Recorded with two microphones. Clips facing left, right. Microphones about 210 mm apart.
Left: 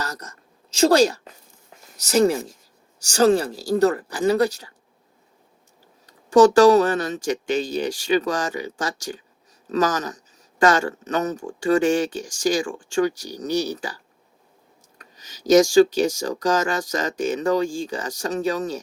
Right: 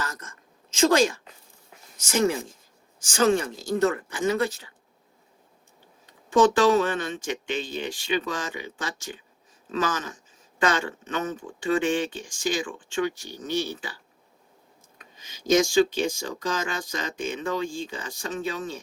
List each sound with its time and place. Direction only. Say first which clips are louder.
0.0 s a sound: left 3 dB; 40° left (ahead or behind)
2.0 s speech: left 5 dB; 35° left (ahead or behind)
6.1 s speech: left 6 dB; 45° left (ahead or behind)